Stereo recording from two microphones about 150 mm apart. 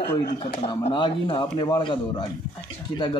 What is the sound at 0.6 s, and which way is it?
Speech, 30° left (ahead or behind).